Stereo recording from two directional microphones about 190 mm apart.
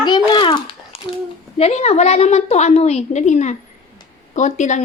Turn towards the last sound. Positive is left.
turn(degrees=40)  # may be behind; listen again after turning